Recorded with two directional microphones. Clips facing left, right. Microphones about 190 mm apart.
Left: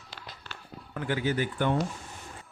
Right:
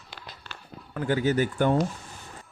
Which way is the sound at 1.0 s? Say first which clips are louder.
Right 5 dB; 40° right (ahead or behind).